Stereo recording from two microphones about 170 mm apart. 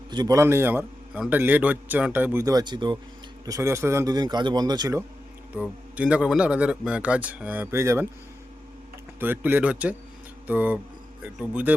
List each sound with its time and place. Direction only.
0.1 s a man's voice: 20° right (ahead or behind)
5.5 s a man's voice: 5° right (ahead or behind)
9.2 s a man's voice: 10° right (ahead or behind)